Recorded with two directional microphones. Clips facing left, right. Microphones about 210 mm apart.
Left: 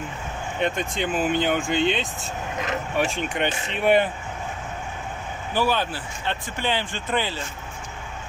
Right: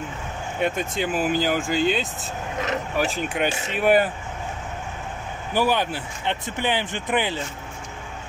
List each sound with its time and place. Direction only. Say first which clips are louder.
0.6 s speech: right 1 dB; 5° right (ahead or behind)
5.5 s speech: right 2 dB; 15° right (ahead or behind)